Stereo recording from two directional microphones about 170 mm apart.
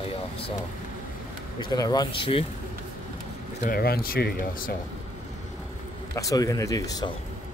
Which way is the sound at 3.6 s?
65° left (ahead or behind).